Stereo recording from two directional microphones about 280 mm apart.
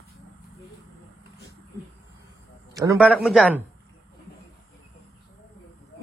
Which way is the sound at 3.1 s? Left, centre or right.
Centre.